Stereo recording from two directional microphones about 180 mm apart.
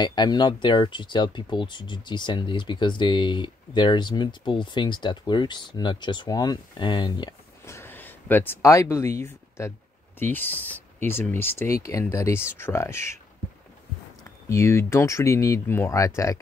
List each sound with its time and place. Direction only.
0.0 s speech: 25° left (ahead or behind)
14.5 s speech: 15° left (ahead or behind)